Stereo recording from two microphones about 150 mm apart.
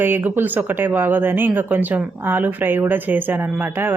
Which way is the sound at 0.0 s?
15° right (ahead or behind).